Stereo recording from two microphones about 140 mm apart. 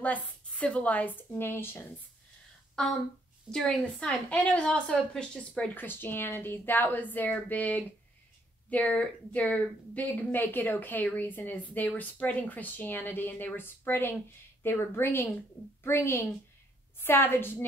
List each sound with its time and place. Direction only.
0.0 s a woman's voice: 10° left (ahead or behind)
2.7 s a woman's voice: 5° left (ahead or behind)